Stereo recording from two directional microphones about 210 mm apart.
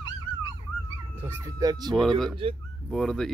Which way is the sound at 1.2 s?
15° right (ahead or behind).